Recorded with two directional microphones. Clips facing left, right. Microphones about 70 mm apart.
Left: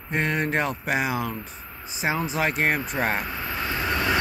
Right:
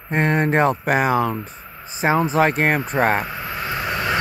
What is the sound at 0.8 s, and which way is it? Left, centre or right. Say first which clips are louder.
Speech: right 7 dB; right.